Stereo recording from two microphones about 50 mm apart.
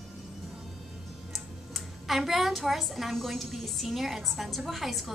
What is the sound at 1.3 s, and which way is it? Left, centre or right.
A woman's voice, centre.